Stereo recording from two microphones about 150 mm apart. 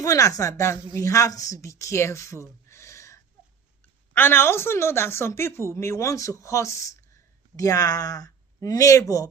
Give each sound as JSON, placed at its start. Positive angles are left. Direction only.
{"t": 0.0, "sound": "speech", "side_deg": 20}